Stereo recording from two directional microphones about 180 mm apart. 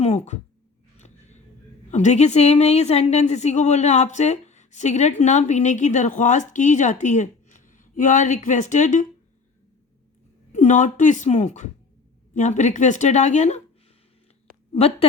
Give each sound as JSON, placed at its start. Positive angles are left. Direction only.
{"t": 0.0, "sound": "speech", "side_deg": 35}
{"t": 0.9, "sound": "a sound", "side_deg": 40}
{"t": 1.9, "sound": "a woman's voice", "side_deg": 40}
{"t": 10.5, "sound": "a woman's voice", "side_deg": 40}
{"t": 14.7, "sound": "a woman's voice", "side_deg": 35}